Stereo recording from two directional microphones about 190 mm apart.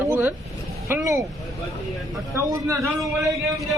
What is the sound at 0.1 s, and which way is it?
Vehicle, 10° right (ahead or behind).